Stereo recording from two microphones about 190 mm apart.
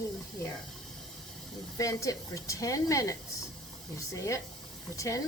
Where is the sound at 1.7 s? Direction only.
15° left (ahead or behind).